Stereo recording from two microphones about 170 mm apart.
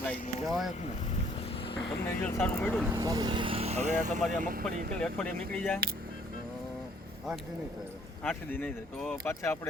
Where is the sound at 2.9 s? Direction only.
20° right (ahead or behind); by 4.2 s 45° right (ahead or behind).